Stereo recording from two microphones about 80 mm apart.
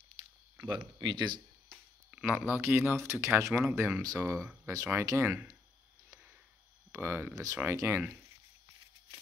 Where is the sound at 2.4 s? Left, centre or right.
Right.